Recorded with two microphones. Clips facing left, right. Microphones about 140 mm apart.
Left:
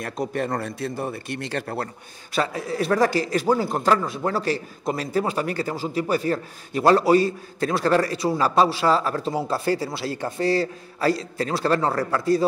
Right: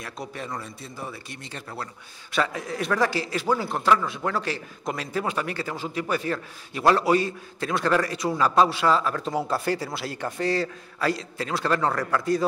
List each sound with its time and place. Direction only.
0.0 s a man's voice: 55° left (ahead or behind); by 1.0 s 70° left (ahead or behind)
1.0 s a man's voice: 55° left (ahead or behind); by 1.7 s 80° left
2.3 s a man's voice: 35° left (ahead or behind)